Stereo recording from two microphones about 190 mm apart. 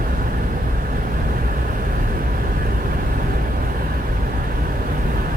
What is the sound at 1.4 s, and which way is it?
Vehicle, 50° right (ahead or behind).